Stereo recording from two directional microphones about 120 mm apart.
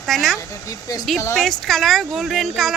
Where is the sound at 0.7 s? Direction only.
30° left (ahead or behind).